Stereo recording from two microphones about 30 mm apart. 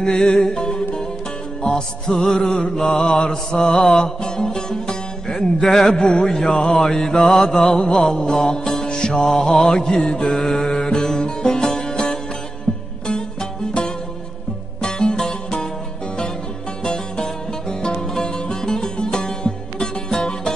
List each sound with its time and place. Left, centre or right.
0.0 s music: left
6.2 s a sound: centre
6.5 s music: left
10.4 s mantra: centre
10.7 s music: left
16.8 s music: left